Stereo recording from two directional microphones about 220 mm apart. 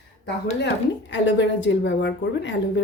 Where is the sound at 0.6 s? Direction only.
55° left (ahead or behind).